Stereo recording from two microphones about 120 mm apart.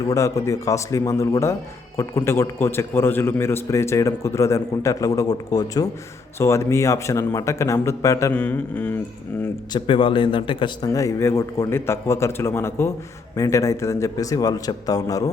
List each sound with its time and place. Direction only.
0.1 s a man's voice: 25° left (ahead or behind)
8.3 s mantra: 15° left (ahead or behind)
9.7 s a man's voice: 45° left (ahead or behind)
10.8 s a man's voice: 30° left (ahead or behind)